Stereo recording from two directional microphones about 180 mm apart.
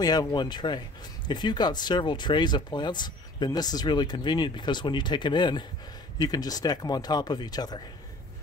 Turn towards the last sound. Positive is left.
turn(degrees=20)  # may be behind; listen again after turning